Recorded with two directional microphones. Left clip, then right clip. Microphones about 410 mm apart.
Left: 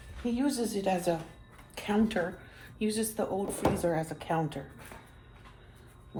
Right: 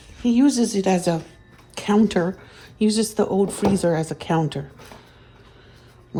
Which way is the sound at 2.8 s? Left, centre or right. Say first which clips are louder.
Right 11 dB; centre.